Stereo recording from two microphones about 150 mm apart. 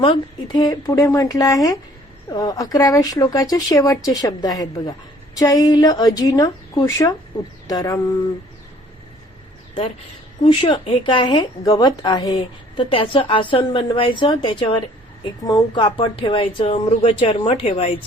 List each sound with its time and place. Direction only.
0.0 s a woman's voice: 30° left (ahead or behind)
10.4 s a woman's voice: 35° left (ahead or behind)